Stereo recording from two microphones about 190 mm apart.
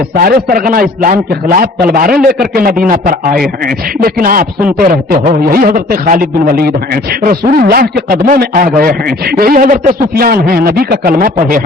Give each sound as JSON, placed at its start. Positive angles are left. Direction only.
{"t": 0.2, "sound": "a man's voice", "side_deg": -50}